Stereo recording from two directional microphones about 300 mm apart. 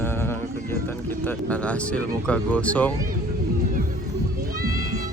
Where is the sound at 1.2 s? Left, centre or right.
Centre.